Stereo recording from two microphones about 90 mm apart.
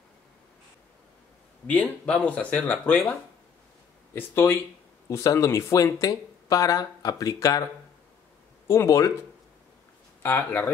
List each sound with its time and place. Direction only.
1.7 s speech: 15° left (ahead or behind)
4.1 s speech: 25° left (ahead or behind)
8.6 s speech: 35° left (ahead or behind)
10.2 s speech: 20° left (ahead or behind)